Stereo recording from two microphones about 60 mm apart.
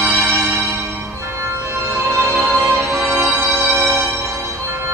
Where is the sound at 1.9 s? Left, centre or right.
Right.